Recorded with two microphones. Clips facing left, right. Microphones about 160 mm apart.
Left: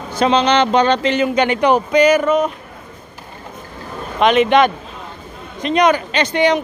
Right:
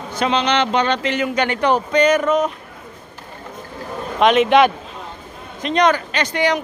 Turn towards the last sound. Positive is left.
turn(degrees=25)  # may be behind; listen again after turning